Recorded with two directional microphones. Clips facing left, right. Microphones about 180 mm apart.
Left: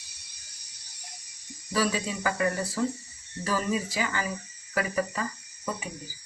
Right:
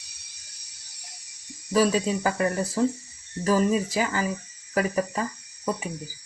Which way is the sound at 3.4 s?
45° right (ahead or behind).